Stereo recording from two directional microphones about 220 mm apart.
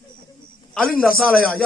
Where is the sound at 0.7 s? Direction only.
5° left (ahead or behind).